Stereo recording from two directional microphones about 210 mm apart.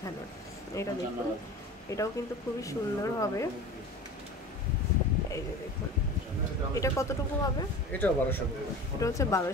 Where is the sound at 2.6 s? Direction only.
15° left (ahead or behind).